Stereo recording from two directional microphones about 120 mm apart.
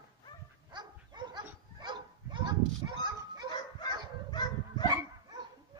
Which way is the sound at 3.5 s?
35° left (ahead or behind).